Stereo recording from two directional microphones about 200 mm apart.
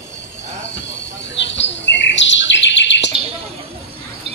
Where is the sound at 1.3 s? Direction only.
65° left (ahead or behind).